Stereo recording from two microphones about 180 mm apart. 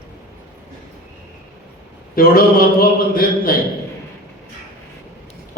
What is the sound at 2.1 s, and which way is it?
A man's voice, 55° left (ahead or behind).